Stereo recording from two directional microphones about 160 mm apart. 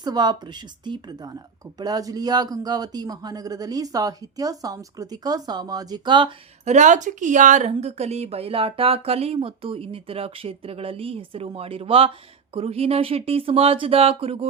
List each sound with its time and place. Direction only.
0.0 s a man's voice: 25° right (ahead or behind)
6.7 s a woman's voice: 50° right (ahead or behind)